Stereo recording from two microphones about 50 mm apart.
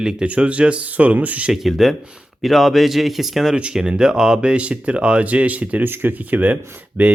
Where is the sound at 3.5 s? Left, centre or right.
Centre; by 5.8 s right.